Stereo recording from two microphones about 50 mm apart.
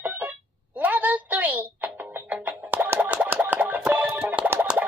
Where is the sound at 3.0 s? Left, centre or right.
Right.